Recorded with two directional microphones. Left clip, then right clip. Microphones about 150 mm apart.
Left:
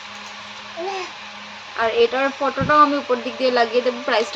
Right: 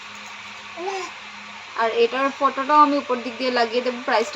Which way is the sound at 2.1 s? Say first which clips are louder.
Even; centre (ahead or behind).